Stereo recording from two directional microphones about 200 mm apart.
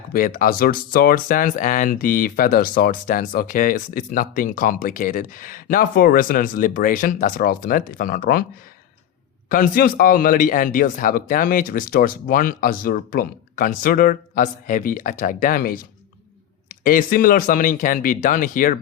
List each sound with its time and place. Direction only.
0.1 s speech: 45° left (ahead or behind)
9.5 s speech: 45° left (ahead or behind)